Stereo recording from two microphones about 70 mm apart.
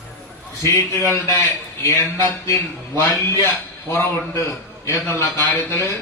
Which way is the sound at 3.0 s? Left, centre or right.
Left.